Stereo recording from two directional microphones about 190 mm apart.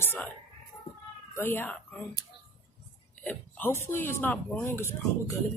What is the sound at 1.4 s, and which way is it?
Speech, 10° left (ahead or behind).